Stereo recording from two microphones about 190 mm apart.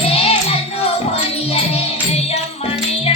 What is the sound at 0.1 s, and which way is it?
Music, 30° left (ahead or behind).